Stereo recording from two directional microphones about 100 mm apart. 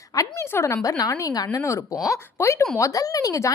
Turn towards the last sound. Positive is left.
turn(degrees=35)  # may be behind; listen again after turning